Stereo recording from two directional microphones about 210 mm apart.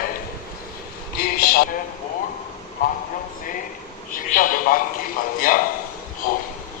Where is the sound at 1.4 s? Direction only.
45° left (ahead or behind).